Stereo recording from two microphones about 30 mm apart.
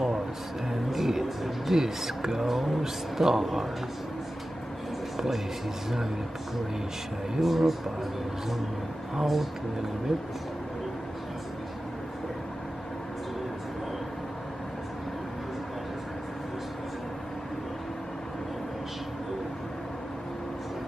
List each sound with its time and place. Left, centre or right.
0.7 s speech: centre
5.1 s a sound: centre
7.3 s speech: centre
9.1 s speech: centre